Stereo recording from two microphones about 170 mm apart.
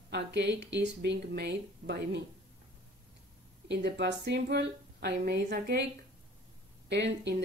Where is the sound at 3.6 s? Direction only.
80° right.